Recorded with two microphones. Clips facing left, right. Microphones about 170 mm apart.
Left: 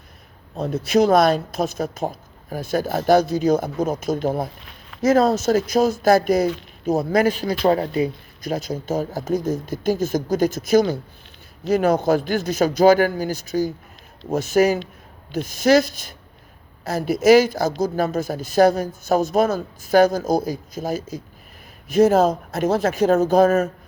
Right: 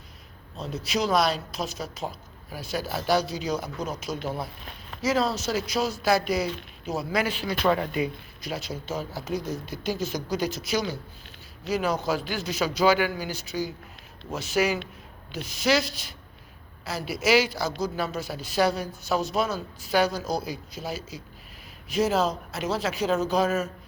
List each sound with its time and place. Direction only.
0.5 s speech: 55° left (ahead or behind)